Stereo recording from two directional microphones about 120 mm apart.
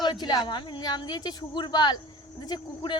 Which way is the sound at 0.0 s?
35° left (ahead or behind).